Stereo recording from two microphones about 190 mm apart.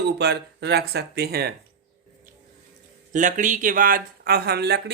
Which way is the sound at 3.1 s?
40° right (ahead or behind).